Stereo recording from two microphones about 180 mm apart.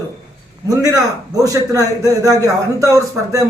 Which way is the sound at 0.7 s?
20° right (ahead or behind).